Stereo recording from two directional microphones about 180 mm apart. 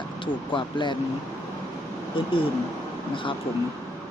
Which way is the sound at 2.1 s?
30° left (ahead or behind).